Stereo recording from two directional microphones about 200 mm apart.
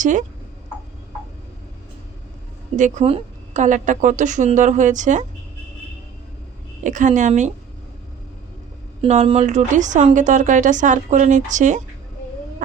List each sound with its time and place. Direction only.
0.0 s a woman's voice: 40° right (ahead or behind)
2.7 s a woman's voice: 40° right (ahead or behind)
6.8 s a woman's voice: 40° right (ahead or behind)
9.0 s a woman's voice: 30° right (ahead or behind)